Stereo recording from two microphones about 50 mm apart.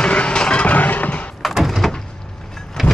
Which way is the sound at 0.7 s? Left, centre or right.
Left.